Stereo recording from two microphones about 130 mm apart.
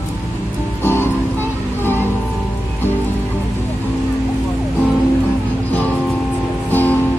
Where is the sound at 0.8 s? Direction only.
20° left (ahead or behind).